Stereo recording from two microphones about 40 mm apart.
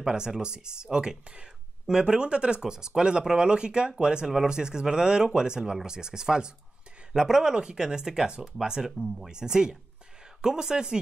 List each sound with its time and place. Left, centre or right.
0.0 s speech: centre